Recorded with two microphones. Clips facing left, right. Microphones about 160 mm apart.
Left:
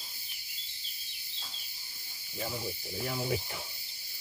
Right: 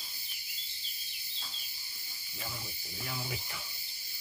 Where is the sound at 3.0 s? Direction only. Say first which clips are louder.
Left 7 dB; 40° left (ahead or behind).